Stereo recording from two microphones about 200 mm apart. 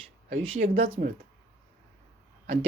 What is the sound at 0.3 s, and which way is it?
Speech, 35° right (ahead or behind).